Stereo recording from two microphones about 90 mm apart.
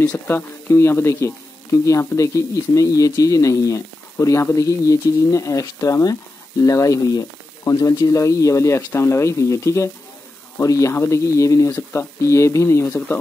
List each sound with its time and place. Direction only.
0.1 s speech: 25° left (ahead or behind)